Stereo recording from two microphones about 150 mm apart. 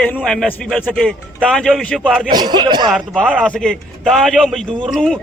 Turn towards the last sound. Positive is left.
turn(degrees=5)  # may be behind; listen again after turning